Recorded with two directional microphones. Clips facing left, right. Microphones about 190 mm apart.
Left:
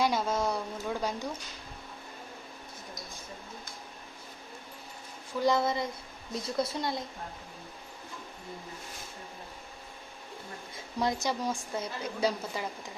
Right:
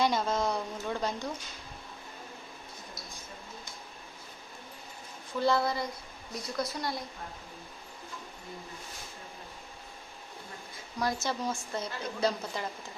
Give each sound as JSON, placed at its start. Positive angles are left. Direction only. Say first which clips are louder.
{"t": 0.0, "sound": "a woman's voice", "louder": "even", "side_deg": 10}
{"t": 5.4, "sound": "speech", "louder": "left 1 dB", "side_deg": 20}
{"t": 11.0, "sound": "a woman's voice", "louder": "left 1 dB", "side_deg": 15}